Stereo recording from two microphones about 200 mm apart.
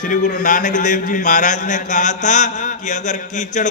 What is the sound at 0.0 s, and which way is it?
A man's voice, 40° left (ahead or behind).